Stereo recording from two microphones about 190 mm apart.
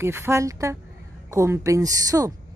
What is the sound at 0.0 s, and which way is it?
Speech, 15° right (ahead or behind).